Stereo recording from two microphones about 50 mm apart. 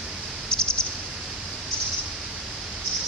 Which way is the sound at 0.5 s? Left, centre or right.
Centre.